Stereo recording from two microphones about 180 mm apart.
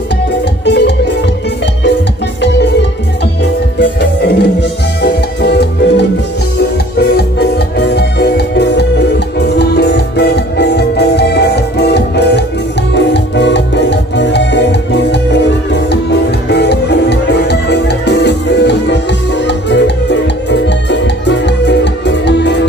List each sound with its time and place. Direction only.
0.7 s music: 75° left (ahead or behind)
3.8 s music: 70° left (ahead or behind)